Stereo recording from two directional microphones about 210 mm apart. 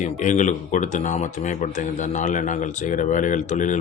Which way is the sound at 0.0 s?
35° left (ahead or behind).